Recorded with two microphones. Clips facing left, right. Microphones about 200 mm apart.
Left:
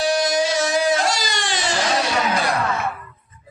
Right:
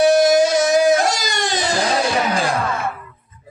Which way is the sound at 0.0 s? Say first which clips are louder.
Right 7 dB; 50° right (ahead or behind).